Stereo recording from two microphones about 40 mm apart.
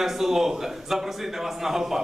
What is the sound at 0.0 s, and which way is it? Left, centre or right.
A man's voice, centre.